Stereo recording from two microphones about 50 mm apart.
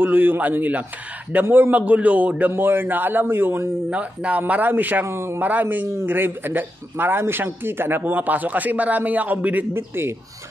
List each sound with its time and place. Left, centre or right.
0.0 s a man's voice: right
1.4 s speech: right
1.8 s a man's voice: right
2.5 s speech: right
3.9 s a man's voice: right
5.0 s speech: right
5.4 s a man's voice: right
8.0 s a man's voice: right
9.8 s speech: right